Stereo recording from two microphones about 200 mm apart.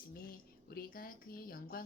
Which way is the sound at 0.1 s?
50° left (ahead or behind).